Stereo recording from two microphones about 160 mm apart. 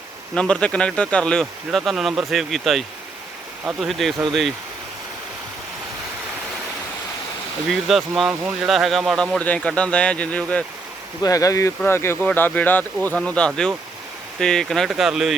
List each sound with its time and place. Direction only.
0.3 s speech: 5° left (ahead or behind)
7.7 s speech: centre (ahead or behind)
11.2 s speech: 20° left (ahead or behind); by 15.4 s centre (ahead or behind)